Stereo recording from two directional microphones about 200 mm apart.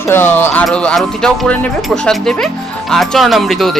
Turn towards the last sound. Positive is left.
turn(degrees=0)  # may be behind; listen again after turning